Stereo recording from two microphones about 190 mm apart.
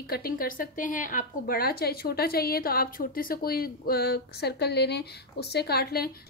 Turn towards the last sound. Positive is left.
turn(degrees=55)  # may be behind; listen again after turning